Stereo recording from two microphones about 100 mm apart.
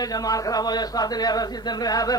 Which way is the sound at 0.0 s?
40° left (ahead or behind).